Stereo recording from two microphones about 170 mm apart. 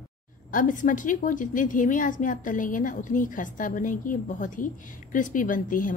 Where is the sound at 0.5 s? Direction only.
50° left (ahead or behind).